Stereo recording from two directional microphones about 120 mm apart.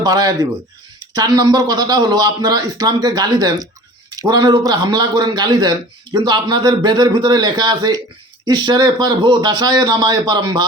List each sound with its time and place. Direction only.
0.0 s a man's voice: 35° right (ahead or behind)